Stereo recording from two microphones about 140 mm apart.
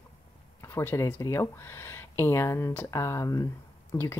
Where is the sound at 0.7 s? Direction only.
20° left (ahead or behind).